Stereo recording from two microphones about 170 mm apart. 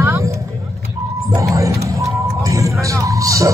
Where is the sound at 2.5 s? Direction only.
20° right (ahead or behind).